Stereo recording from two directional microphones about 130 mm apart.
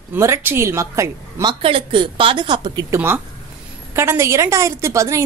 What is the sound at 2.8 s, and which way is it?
A woman's voice, 20° right (ahead or behind).